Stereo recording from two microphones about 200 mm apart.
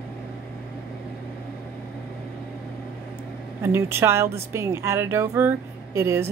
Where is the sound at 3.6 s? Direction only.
10° right (ahead or behind).